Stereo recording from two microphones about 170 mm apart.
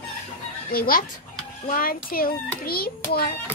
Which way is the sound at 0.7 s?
60° left (ahead or behind).